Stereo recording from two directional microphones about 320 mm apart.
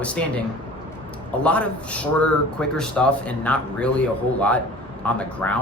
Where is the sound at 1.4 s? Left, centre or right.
Centre.